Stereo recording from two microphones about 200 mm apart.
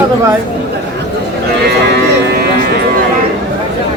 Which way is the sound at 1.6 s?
50° right (ahead or behind).